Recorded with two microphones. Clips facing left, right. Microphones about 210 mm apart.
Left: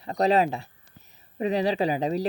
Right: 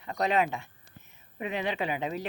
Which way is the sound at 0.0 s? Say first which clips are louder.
Left 5 dB; 35° left (ahead or behind).